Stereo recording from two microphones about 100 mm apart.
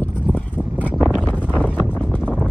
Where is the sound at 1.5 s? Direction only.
15° left (ahead or behind).